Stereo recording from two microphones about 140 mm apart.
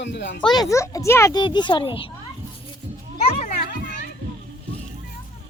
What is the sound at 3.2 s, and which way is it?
Children playing, 55° left (ahead or behind).